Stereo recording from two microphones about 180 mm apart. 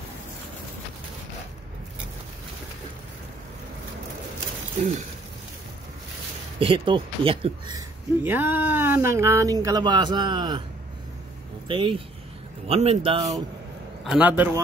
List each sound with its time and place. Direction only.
6.6 s speech: 30° right (ahead or behind)
8.2 s speech: 10° right (ahead or behind)
11.6 s speech: 30° right (ahead or behind)
14.0 s speech: 5° right (ahead or behind)